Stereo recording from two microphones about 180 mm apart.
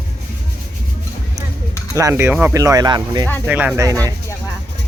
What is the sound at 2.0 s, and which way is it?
Speech, 15° right (ahead or behind).